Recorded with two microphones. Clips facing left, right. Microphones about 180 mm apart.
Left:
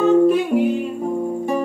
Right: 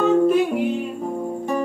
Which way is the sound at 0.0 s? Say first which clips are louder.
Left 2 dB; centre (ahead or behind).